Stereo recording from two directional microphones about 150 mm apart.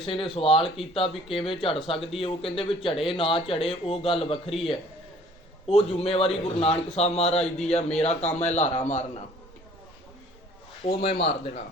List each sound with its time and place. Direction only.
0.0 s speech: 40° left (ahead or behind)
5.6 s a man's voice: 40° left (ahead or behind)
11.0 s a man's voice: 40° left (ahead or behind)